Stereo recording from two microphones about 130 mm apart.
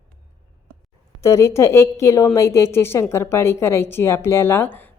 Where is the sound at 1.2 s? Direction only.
25° left (ahead or behind).